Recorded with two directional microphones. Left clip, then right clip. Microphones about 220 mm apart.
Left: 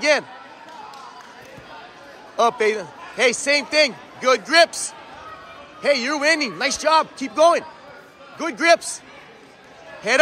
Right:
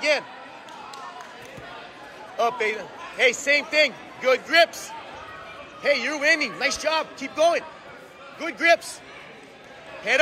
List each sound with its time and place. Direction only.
2.3 s a man's voice: 35° left (ahead or behind)